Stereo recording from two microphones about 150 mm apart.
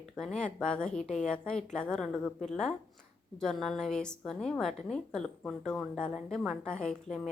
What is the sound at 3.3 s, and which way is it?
A woman's voice, 5° left (ahead or behind).